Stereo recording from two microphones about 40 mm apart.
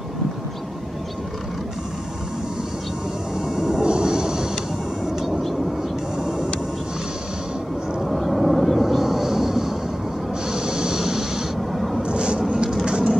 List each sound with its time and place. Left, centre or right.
3.3 s vehicle: centre
3.8 s vehicle: right
8.0 s vehicle: centre
10.5 s a sound: right; by 12.0 s centre
12.0 s vehicle: right
12.8 s a sound: centre